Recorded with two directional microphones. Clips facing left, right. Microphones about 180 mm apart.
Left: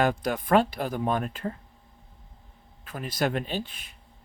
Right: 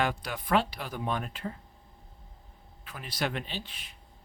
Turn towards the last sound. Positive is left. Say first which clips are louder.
# left 7 dB
turn(degrees=45)  # may be behind; listen again after turning